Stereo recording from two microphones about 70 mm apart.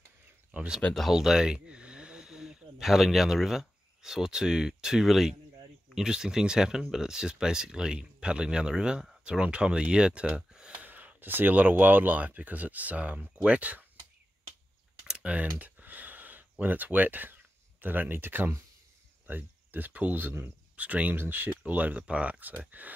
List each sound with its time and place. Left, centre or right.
1.1 s speech: centre
15.0 s computer keyboard: centre
19.2 s speech: right